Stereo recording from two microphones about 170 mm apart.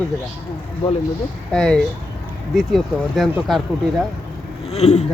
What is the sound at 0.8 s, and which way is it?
Speech, 35° left (ahead or behind).